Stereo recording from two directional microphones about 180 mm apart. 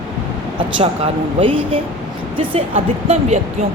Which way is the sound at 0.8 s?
30° right (ahead or behind).